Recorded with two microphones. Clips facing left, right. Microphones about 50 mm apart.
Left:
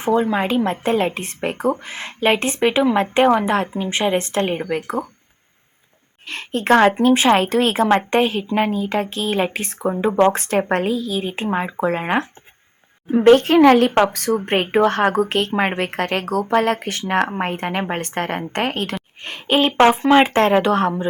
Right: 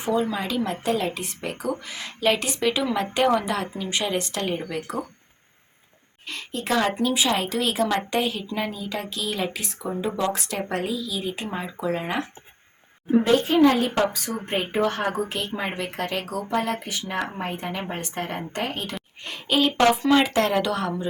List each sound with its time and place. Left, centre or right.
0.0 s a woman's voice: left
6.2 s a woman's voice: left
13.1 s a woman's voice: left
19.2 s a woman's voice: left